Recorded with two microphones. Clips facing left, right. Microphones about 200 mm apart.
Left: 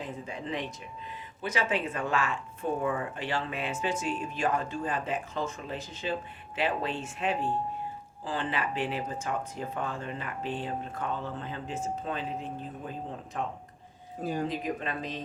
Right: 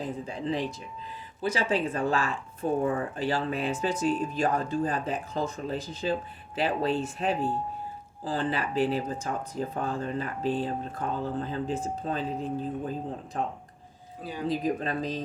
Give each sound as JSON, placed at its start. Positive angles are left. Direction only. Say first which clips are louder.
{"t": 0.0, "sound": "speech", "louder": "right 5 dB", "side_deg": -35}
{"t": 14.2, "sound": "speech", "louder": "left 5 dB", "side_deg": 45}
{"t": 14.4, "sound": "speech", "louder": "right 4 dB", "side_deg": -35}